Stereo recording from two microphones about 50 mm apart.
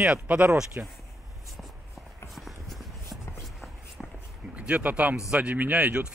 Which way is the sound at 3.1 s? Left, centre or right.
Centre.